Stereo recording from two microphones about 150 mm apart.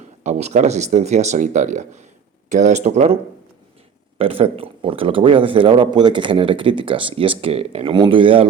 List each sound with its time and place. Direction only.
0.2 s speech: 50° right (ahead or behind)
4.2 s speech: 40° right (ahead or behind)